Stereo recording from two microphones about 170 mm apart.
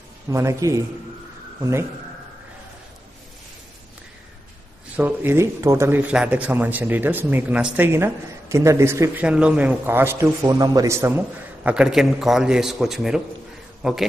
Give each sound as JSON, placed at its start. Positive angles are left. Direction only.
{"t": 0.3, "sound": "speech", "side_deg": -15}
{"t": 4.9, "sound": "a man's voice", "side_deg": -10}